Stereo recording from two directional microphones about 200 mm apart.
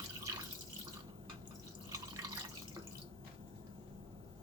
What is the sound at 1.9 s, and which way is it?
Drip, 20° right (ahead or behind).